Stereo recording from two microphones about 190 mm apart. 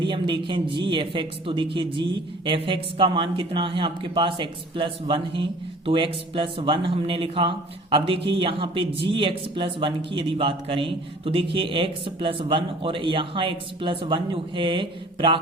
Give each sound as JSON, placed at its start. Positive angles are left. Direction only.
{"t": 0.0, "sound": "a man's voice", "side_deg": -25}